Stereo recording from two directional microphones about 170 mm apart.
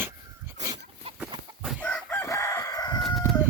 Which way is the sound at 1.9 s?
10° left (ahead or behind).